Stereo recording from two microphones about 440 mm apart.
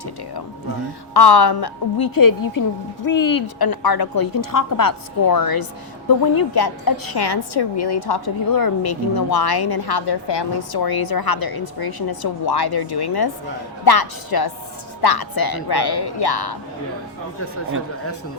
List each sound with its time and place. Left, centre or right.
1.1 s a woman's voice: left